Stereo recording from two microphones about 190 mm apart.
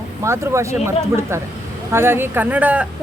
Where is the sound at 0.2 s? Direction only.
15° right (ahead or behind).